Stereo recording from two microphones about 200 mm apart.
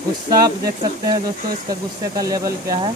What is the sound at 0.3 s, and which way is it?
Speech, 20° right (ahead or behind).